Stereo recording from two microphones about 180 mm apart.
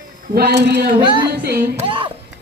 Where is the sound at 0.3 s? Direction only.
65° right (ahead or behind).